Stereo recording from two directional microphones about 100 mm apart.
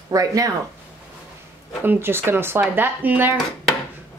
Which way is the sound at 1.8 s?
25° right (ahead or behind).